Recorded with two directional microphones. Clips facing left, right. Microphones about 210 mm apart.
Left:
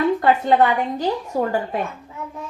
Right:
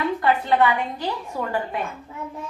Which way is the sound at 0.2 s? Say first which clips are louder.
Left 3 dB; 45° left (ahead or behind).